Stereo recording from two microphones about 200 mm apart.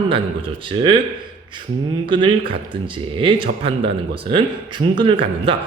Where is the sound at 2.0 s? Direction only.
25° right (ahead or behind).